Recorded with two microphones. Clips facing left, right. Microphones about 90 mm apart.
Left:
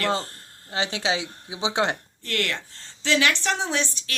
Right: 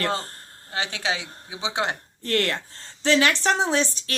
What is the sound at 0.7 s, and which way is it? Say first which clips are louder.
A woman's voice: left 2 dB; 25° left (ahead or behind).